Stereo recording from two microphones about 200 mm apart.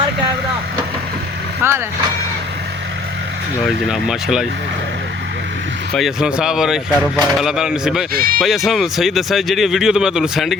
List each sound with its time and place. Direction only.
1.6 s speech: 10° right (ahead or behind)
3.8 s speech: centre (ahead or behind)
5.9 s speech: centre (ahead or behind)
8.1 s speech: 50° right (ahead or behind)
8.4 s speech: centre (ahead or behind)